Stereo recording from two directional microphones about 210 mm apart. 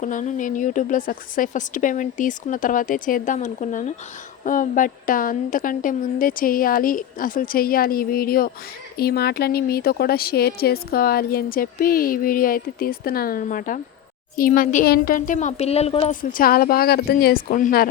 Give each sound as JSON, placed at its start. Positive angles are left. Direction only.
{"t": 0.0, "sound": "a woman's voice", "side_deg": 35}
{"t": 16.3, "sound": "speech", "side_deg": 45}